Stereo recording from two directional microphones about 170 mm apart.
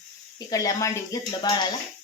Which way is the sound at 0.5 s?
20° left (ahead or behind).